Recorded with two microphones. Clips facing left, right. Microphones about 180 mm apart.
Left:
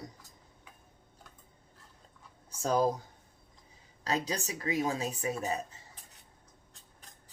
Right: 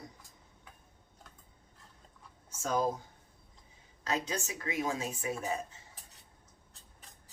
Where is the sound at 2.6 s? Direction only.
35° left (ahead or behind).